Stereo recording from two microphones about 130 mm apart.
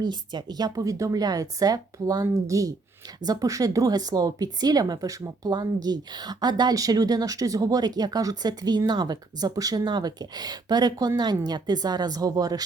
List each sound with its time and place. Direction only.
0.0 s a woman's voice: 35° right (ahead or behind)